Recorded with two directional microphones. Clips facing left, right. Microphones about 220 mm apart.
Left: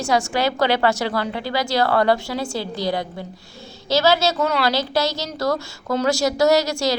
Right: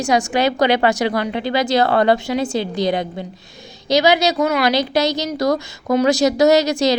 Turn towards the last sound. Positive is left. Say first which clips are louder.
# right 4 dB
turn(degrees=-20)  # may be behind; listen again after turning